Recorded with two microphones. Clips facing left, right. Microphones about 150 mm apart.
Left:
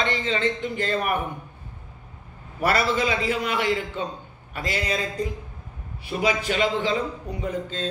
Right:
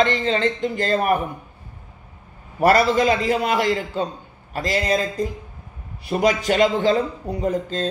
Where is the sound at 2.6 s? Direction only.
40° right (ahead or behind).